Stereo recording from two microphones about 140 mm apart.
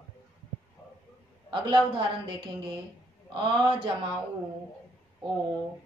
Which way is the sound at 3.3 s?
35° right (ahead or behind).